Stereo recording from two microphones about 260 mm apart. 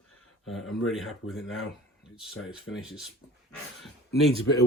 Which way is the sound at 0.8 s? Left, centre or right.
Centre.